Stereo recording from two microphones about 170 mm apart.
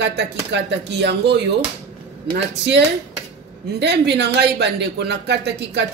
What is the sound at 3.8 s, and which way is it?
A woman's voice, 80° right.